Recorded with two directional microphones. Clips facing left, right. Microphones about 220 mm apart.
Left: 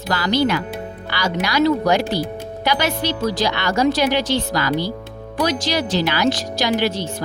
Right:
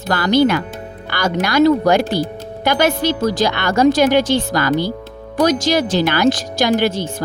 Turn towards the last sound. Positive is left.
turn(degrees=-50)  # may be behind; listen again after turning